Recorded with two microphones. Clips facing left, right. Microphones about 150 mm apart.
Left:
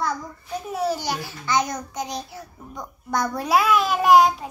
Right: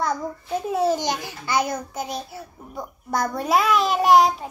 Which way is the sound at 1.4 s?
10° right (ahead or behind).